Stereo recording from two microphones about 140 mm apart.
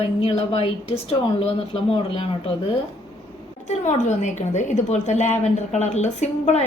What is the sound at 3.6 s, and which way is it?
A woman's voice, 55° left (ahead or behind).